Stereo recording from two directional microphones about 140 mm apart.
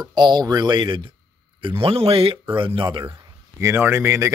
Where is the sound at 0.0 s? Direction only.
30° right (ahead or behind).